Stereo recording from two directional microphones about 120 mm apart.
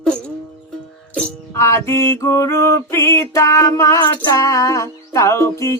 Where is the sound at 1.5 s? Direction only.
20° left (ahead or behind).